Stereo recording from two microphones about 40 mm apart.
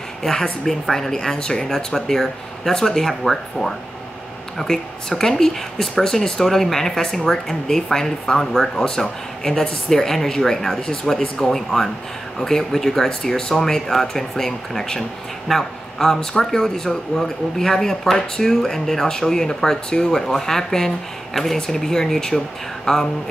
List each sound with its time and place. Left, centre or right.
0.2 s speech: centre